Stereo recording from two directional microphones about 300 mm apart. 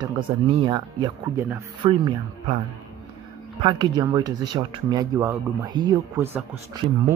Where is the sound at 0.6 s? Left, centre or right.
Centre.